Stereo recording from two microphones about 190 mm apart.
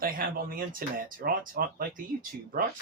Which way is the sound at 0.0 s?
50° right (ahead or behind).